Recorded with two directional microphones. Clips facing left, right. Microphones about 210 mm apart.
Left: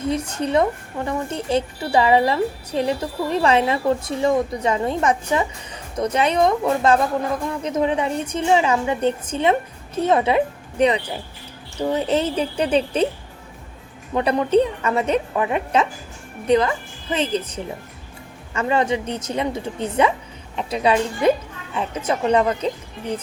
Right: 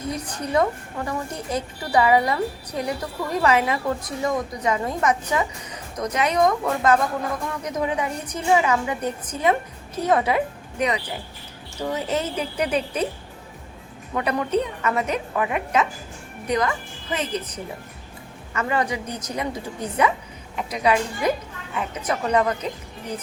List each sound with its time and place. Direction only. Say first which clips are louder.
0.1 s a woman's voice: left 4 dB; 25° left (ahead or behind)
14.2 s a woman's voice: left 6 dB; 30° left (ahead or behind)